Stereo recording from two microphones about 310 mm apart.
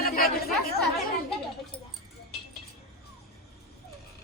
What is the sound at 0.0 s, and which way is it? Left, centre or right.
Chatter, left.